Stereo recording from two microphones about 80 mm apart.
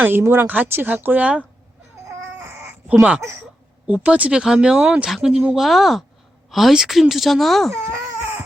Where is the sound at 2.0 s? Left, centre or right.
Right.